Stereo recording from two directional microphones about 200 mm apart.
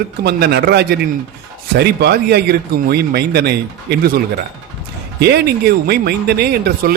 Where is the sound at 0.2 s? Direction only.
50° right (ahead or behind).